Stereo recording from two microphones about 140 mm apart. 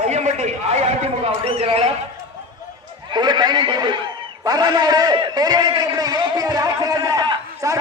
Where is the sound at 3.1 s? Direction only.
30° right (ahead or behind).